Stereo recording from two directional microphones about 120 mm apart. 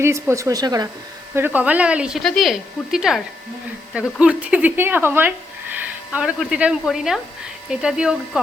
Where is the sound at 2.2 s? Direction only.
Centre (ahead or behind).